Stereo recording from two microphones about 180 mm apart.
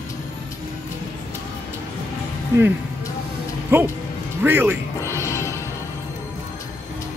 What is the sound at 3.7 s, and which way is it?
Speech, 10° right (ahead or behind).